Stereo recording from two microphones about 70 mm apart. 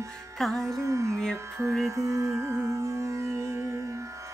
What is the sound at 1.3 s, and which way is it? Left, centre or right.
Mantra, right.